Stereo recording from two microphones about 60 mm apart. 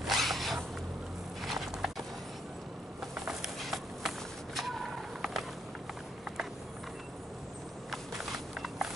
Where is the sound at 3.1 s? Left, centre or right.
Centre.